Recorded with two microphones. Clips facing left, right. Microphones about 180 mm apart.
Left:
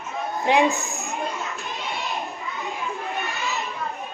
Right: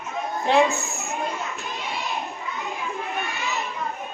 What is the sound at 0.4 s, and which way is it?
Speech, 15° left (ahead or behind).